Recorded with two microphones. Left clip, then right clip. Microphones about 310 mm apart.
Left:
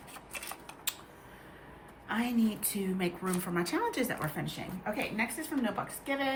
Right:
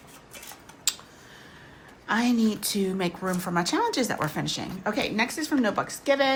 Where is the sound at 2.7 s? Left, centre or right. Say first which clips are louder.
Right 7 dB; centre.